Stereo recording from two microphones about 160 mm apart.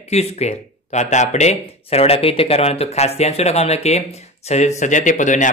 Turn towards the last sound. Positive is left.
turn(degrees=50)  # may be behind; listen again after turning